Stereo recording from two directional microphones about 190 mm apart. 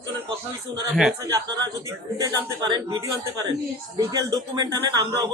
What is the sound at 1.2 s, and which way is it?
Speech, 20° right (ahead or behind).